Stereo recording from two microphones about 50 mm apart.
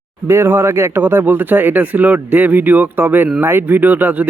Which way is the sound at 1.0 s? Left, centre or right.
Right.